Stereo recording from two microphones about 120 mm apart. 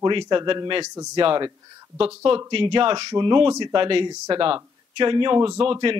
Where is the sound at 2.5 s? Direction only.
45° right (ahead or behind).